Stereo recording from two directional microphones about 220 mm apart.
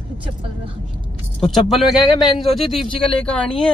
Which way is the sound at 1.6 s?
Centre (ahead or behind).